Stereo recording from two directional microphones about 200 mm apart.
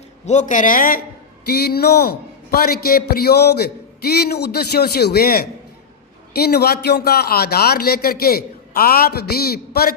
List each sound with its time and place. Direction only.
0.3 s a man's voice: 40° left (ahead or behind)